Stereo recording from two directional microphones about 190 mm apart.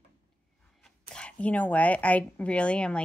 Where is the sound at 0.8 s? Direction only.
5° left (ahead or behind).